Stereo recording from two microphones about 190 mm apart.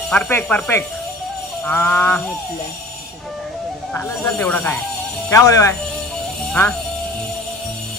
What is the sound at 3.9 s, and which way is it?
Speech, 10° left (ahead or behind).